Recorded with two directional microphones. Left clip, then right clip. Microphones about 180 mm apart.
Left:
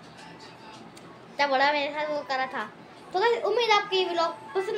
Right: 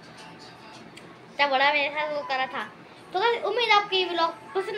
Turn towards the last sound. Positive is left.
turn(degrees=10)  # may be behind; listen again after turning